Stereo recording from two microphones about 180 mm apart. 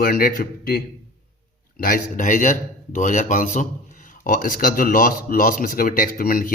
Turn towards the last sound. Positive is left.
turn(degrees=50)  # may be behind; listen again after turning